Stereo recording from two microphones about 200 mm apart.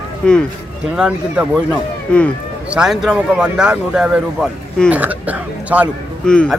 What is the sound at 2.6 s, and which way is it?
Speech, 5° right (ahead or behind).